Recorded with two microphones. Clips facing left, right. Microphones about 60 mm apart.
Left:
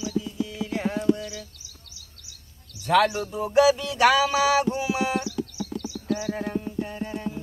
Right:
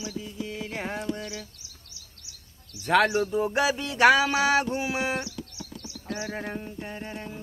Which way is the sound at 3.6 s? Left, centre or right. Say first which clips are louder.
Left 7 dB; right.